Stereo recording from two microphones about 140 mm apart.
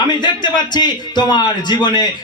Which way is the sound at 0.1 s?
35° left (ahead or behind).